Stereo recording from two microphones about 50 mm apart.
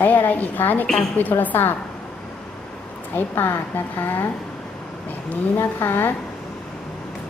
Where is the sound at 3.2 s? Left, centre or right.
Left.